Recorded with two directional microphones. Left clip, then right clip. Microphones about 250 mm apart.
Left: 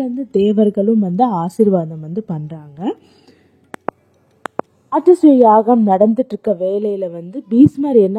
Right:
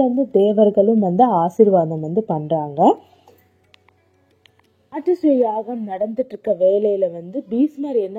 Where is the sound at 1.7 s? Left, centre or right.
Left.